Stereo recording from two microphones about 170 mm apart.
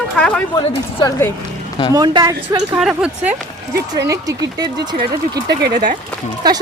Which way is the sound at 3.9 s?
20° right (ahead or behind).